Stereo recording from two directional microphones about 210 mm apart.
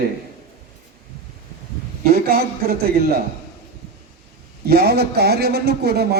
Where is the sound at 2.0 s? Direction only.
45° right (ahead or behind).